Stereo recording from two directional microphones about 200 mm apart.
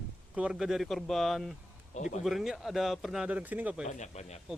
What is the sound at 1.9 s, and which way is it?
Speech, 35° left (ahead or behind).